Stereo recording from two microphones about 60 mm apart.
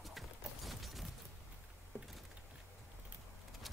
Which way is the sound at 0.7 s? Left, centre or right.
Centre.